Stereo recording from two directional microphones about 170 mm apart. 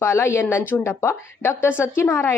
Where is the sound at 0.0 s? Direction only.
15° left (ahead or behind).